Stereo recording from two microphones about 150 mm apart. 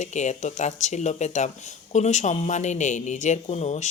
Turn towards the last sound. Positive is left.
turn(degrees=50)  # may be behind; listen again after turning